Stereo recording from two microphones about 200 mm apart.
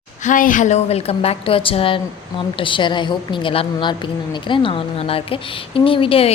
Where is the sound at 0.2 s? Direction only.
40° left (ahead or behind).